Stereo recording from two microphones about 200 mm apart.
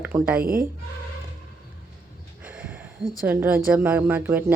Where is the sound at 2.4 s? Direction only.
5° right (ahead or behind).